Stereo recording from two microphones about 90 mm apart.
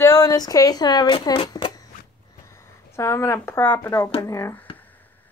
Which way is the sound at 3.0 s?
30° left (ahead or behind).